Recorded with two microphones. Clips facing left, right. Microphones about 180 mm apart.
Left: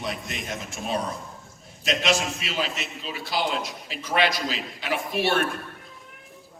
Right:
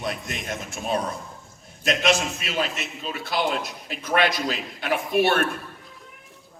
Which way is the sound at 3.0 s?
50° right (ahead or behind).